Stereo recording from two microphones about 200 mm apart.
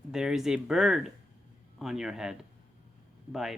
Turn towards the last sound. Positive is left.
turn(degrees=0)  # may be behind; listen again after turning